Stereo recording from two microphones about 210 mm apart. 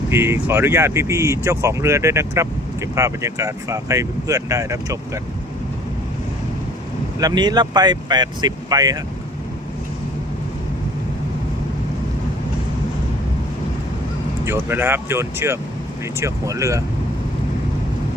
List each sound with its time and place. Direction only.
0.1 s speech: 10° right (ahead or behind)
7.2 s speech: 20° right (ahead or behind)
14.4 s speech: 10° right (ahead or behind)